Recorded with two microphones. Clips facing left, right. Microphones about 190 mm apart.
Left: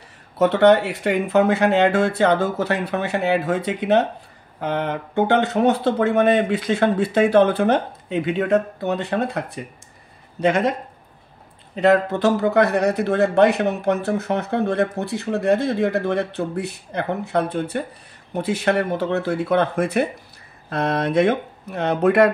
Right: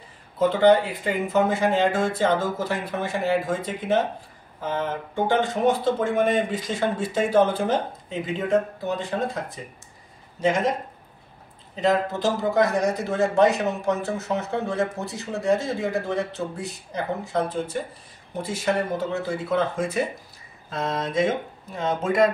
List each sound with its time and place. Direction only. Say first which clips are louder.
0.4 s speech: left 3 dB; 75° left (ahead or behind)
11.7 s speech: left 5 dB; 65° left (ahead or behind)